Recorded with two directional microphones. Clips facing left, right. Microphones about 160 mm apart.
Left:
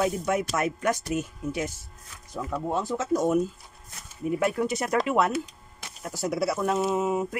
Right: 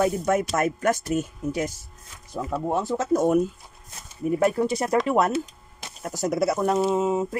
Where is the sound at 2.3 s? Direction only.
25° right (ahead or behind).